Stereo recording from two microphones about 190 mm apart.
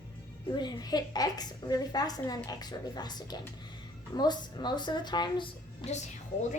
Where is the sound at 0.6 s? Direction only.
20° left (ahead or behind).